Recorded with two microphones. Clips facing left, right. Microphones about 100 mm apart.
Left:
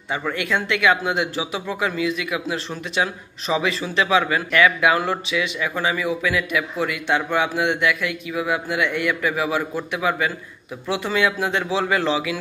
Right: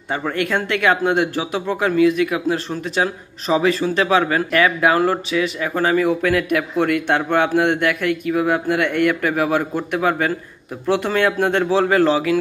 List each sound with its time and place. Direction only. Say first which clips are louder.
0.3 s speech: right 3 dB; 45° right (ahead or behind)